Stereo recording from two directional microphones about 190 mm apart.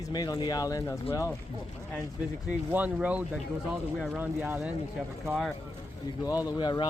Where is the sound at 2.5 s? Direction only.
10° right (ahead or behind).